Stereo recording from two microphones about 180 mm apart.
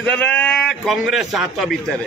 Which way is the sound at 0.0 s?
5° left (ahead or behind).